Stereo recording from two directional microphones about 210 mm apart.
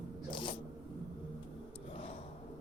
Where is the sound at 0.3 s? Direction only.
20° left (ahead or behind).